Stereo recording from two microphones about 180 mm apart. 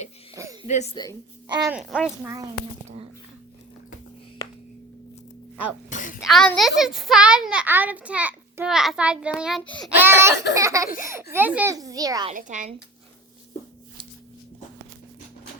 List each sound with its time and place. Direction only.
0.3 s a sound: 15° right (ahead or behind)
1.7 s a child's voice: 5° right (ahead or behind)
5.9 s a sound: 45° left (ahead or behind)
6.1 s a child's voice: centre (ahead or behind)
10.0 s a child's voice: 15° right (ahead or behind)
12.3 s a woman's voice: 45° right (ahead or behind)